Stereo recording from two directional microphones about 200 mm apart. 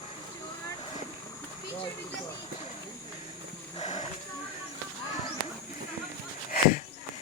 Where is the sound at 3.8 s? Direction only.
35° left (ahead or behind).